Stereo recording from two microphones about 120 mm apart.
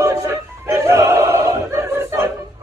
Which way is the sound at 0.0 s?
25° right (ahead or behind).